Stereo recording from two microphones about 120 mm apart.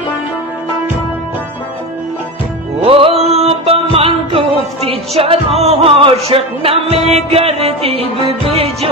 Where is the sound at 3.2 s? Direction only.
60° right (ahead or behind).